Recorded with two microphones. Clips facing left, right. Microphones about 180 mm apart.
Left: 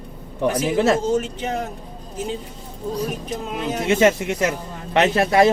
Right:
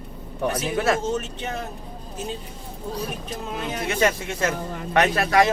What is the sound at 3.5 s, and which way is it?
Speech, 20° left (ahead or behind).